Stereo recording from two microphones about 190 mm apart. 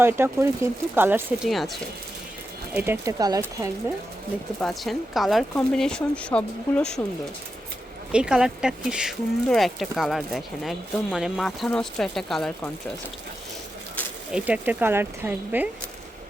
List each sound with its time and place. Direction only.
0.0 s speech: 15° right (ahead or behind)
1.5 s speech: centre (ahead or behind)
2.7 s speech: 10° right (ahead or behind)
4.6 s speech: centre (ahead or behind)
8.1 s speech: 5° right (ahead or behind)
14.3 s speech: 5° right (ahead or behind)